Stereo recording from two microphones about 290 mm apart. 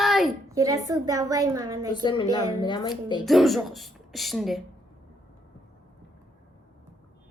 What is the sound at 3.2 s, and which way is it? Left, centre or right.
Speech, centre.